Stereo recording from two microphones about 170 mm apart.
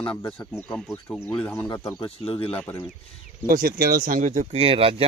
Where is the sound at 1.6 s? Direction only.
25° left (ahead or behind).